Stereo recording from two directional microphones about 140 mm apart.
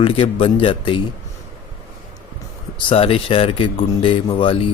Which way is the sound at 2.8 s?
40° left (ahead or behind).